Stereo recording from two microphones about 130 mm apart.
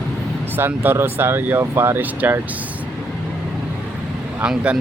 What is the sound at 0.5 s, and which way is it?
Speech, 15° right (ahead or behind).